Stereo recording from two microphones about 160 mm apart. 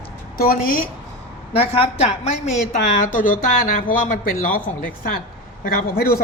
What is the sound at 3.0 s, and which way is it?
Speech, 60° left (ahead or behind).